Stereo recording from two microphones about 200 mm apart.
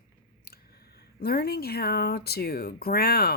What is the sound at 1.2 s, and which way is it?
Speech, 50° left (ahead or behind).